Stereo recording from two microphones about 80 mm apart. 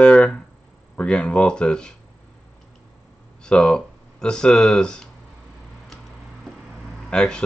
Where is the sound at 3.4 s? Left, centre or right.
Centre.